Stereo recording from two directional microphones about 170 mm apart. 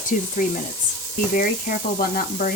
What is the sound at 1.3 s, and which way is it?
Speech, 55° left (ahead or behind).